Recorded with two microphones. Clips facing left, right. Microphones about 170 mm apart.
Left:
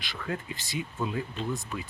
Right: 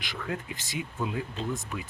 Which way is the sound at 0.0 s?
15° right (ahead or behind).